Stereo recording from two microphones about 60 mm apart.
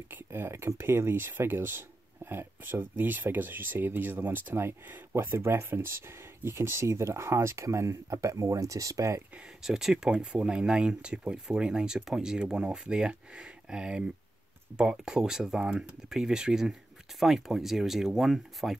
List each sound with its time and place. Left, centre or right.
0.1 s speech: right
9.6 s speech: centre